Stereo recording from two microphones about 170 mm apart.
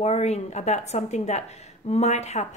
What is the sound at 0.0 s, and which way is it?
Speech, 40° left (ahead or behind).